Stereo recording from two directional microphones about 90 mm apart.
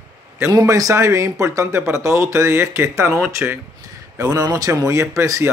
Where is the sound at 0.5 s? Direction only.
40° right (ahead or behind).